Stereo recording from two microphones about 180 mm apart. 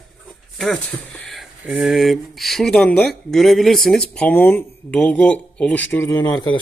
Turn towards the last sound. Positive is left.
turn(degrees=25)  # may be behind; listen again after turning